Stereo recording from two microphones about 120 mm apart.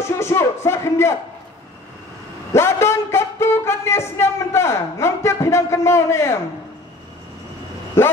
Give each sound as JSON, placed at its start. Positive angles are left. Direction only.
{"t": 0.0, "sound": "a sound", "side_deg": 20}
{"t": 2.5, "sound": "a man's voice", "side_deg": 20}
{"t": 8.0, "sound": "a man's voice", "side_deg": 20}